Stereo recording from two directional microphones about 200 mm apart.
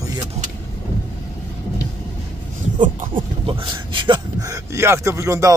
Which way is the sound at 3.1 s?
25° right (ahead or behind).